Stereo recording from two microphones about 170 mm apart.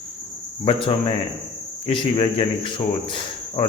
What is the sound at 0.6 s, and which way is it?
Cricket, 30° left (ahead or behind).